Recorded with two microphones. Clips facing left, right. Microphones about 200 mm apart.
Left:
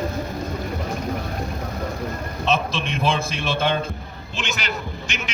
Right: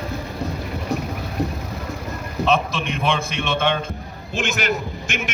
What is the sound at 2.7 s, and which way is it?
Speech, 30° left (ahead or behind).